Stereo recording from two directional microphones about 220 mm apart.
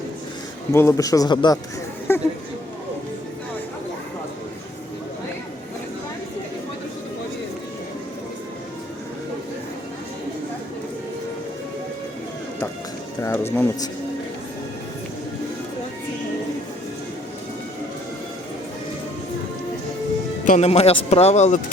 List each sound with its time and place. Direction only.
0.7 s speech: 15° left (ahead or behind)
2.1 s chatter: 10° left (ahead or behind)
13.2 s speech: 10° left (ahead or behind)
20.4 s speech: 30° left (ahead or behind)